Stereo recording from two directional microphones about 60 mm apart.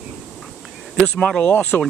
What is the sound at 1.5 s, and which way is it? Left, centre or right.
Speech, left.